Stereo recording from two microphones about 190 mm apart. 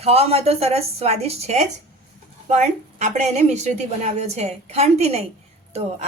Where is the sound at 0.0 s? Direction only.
30° right (ahead or behind).